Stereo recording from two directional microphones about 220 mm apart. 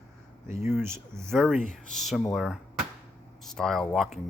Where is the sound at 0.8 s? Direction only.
10° right (ahead or behind).